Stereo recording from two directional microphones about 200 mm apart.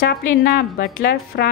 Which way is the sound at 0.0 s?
50° left (ahead or behind).